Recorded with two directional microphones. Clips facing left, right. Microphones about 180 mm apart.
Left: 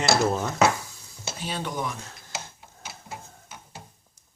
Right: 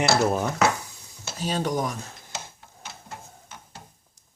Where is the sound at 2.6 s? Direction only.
5° left (ahead or behind).